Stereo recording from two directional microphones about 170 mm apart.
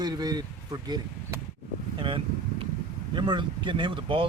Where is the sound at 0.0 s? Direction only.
25° right (ahead or behind).